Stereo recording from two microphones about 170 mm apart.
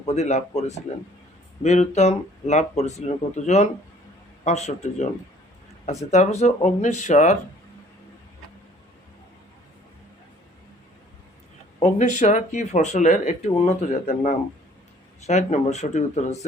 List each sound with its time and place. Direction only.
0.0 s speech: 40° left (ahead or behind)
11.8 s speech: 45° left (ahead or behind)